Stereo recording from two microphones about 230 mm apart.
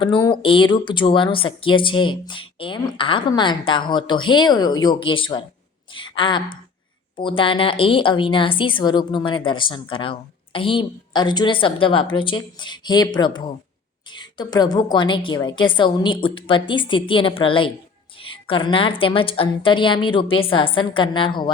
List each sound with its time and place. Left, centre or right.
0.0 s a woman's voice: centre